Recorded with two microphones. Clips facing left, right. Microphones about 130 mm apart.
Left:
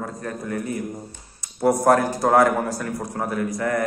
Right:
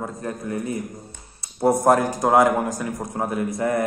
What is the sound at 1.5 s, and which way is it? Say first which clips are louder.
A man's voice: even; 25° right (ahead or behind).